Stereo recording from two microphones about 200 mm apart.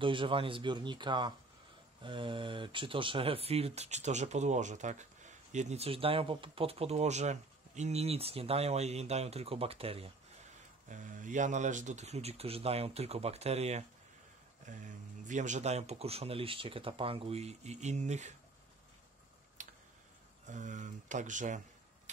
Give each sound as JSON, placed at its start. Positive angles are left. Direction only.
{"t": 0.0, "sound": "speech", "side_deg": -25}
{"t": 10.9, "sound": "speech", "side_deg": -40}
{"t": 19.6, "sound": "tick", "side_deg": -40}
{"t": 20.4, "sound": "speech", "side_deg": -40}